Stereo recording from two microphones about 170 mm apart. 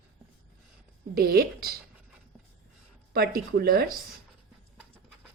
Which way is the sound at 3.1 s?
65° right (ahead or behind).